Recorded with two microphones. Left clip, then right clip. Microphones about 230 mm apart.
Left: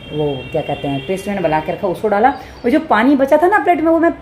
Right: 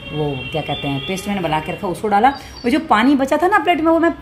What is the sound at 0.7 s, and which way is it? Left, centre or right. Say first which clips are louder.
A woman's voice: left 2 dB; right.